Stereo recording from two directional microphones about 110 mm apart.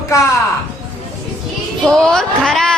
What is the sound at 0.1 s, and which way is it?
Speech, 30° left (ahead or behind).